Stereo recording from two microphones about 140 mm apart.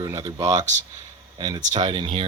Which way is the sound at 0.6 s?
60° right (ahead or behind).